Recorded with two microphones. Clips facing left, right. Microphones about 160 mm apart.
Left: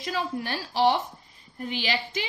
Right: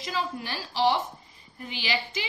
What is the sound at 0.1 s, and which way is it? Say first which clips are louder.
Speech: left 2 dB; 55° left (ahead or behind).